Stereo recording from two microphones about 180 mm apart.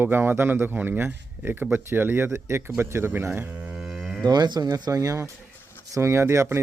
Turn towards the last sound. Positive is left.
turn(degrees=-15)  # may be behind; listen again after turning